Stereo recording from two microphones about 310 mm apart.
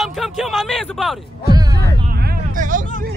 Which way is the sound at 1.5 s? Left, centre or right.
Centre.